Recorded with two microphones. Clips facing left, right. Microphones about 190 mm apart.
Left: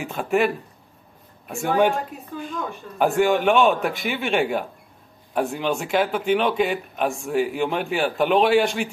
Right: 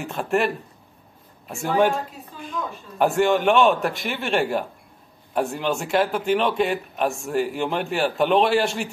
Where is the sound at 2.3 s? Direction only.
60° left (ahead or behind).